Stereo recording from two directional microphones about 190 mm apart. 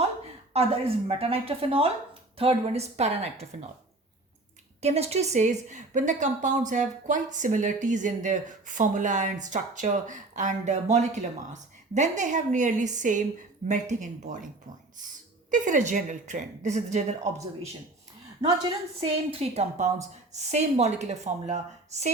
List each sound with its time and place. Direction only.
0.5 s speech: 30° right (ahead or behind)
4.8 s speech: 35° right (ahead or behind)
18.4 s speech: 25° right (ahead or behind)